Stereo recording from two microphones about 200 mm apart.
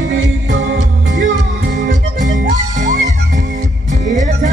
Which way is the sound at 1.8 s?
40° right (ahead or behind).